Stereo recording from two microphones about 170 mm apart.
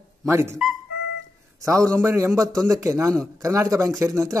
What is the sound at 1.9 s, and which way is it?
Speech, 15° right (ahead or behind).